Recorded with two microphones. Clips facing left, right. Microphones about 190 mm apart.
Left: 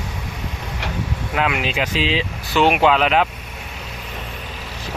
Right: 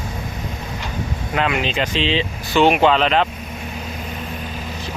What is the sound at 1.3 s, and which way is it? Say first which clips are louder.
Speech: right 1 dB; 5° left (ahead or behind).